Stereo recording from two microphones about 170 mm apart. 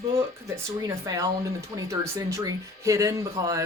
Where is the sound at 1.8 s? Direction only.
20° right (ahead or behind).